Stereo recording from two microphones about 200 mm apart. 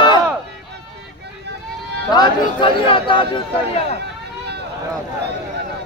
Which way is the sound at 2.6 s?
25° left (ahead or behind).